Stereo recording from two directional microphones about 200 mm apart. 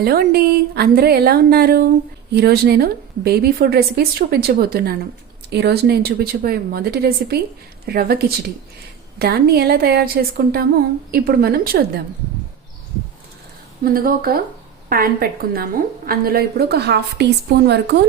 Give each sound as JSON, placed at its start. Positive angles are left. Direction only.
{"t": 0.0, "sound": "a woman's voice", "side_deg": -50}
{"t": 13.8, "sound": "a woman's voice", "side_deg": -50}